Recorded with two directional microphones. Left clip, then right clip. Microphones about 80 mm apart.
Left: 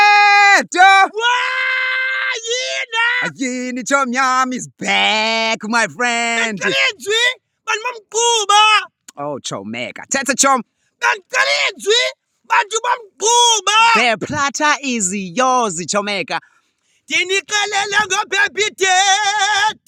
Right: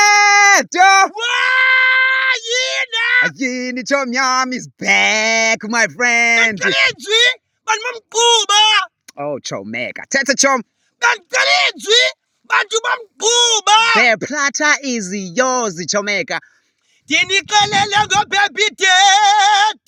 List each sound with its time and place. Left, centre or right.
0.0 s sheep: centre
1.1 s screaming: left
4.9 s speech: centre; by 8.9 s left
9.0 s a sound: left
9.3 s speech: left
14.1 s speech: left
16.0 s speech: left
17.1 s speech: left